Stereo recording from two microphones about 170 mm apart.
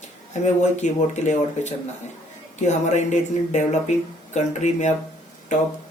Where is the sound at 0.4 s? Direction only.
45° left (ahead or behind).